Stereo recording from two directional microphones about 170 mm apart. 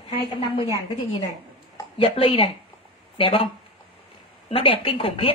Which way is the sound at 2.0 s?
35° left (ahead or behind).